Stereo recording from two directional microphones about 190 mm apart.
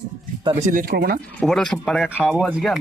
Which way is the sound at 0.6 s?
50° right (ahead or behind).